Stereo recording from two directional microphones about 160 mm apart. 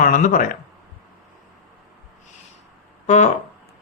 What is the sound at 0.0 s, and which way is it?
Speech, 55° left (ahead or behind).